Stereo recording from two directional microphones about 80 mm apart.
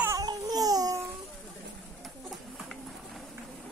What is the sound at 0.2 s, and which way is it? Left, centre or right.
Baby cry, right.